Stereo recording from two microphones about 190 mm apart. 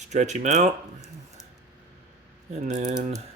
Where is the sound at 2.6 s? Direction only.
35° right (ahead or behind).